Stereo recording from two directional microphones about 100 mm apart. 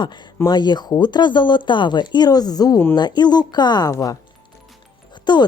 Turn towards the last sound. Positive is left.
turn(degrees=45)  # may be behind; listen again after turning